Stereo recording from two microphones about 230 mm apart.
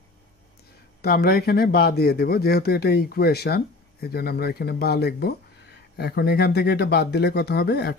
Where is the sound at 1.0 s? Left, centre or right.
Left.